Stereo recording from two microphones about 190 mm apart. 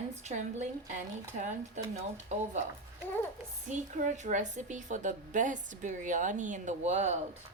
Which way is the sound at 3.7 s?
40° right (ahead or behind).